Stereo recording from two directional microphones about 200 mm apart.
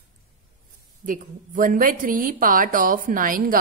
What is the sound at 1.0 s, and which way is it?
A woman's voice, 40° right (ahead or behind).